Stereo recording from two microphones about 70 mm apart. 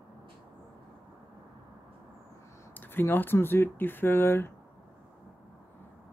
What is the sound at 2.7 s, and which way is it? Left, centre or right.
Speech, left.